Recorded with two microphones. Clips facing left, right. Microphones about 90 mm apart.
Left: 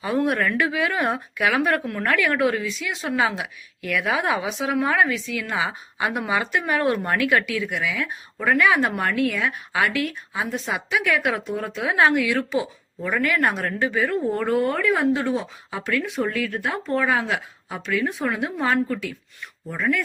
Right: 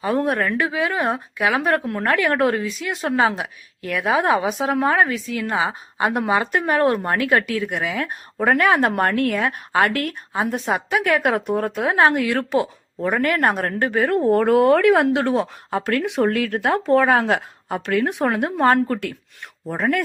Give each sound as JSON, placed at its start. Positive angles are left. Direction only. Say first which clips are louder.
{"t": 0.0, "sound": "speech", "louder": "right 2 dB", "side_deg": -35}
{"t": 13.1, "sound": "a woman's voice", "louder": "right 3 dB", "side_deg": -40}
{"t": 14.3, "sound": "speech", "louder": "right 7 dB", "side_deg": -85}